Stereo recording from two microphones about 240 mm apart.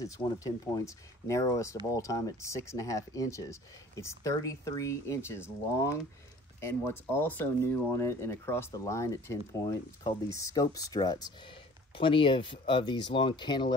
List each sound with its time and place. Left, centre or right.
0.0 s speech: centre